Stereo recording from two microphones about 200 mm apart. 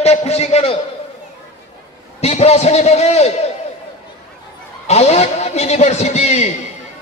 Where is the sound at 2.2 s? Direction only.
30° left (ahead or behind).